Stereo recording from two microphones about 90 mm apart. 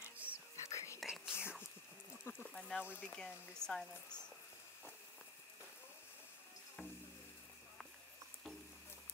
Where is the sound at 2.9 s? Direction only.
15° left (ahead or behind).